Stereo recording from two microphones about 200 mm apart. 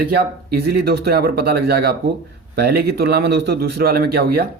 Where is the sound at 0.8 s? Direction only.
50° right (ahead or behind).